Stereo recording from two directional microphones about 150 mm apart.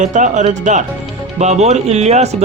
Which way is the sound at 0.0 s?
55° right (ahead or behind).